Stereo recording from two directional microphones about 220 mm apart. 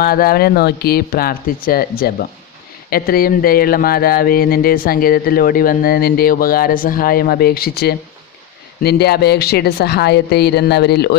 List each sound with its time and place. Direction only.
0.0 s speech: 40° left (ahead or behind)